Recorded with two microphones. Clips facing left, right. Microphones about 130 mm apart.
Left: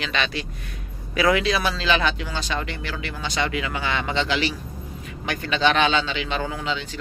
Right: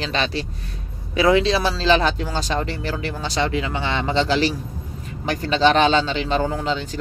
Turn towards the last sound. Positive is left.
turn(degrees=-40)  # may be behind; listen again after turning